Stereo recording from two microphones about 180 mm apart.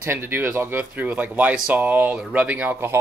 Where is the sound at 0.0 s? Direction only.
15° right (ahead or behind).